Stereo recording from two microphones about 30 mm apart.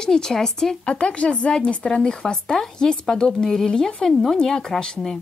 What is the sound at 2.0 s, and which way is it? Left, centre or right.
Speech, centre.